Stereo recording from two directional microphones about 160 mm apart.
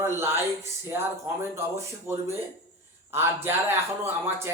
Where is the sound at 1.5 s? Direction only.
15° right (ahead or behind).